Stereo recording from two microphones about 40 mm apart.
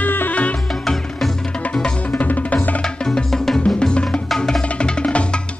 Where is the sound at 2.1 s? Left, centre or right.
Left.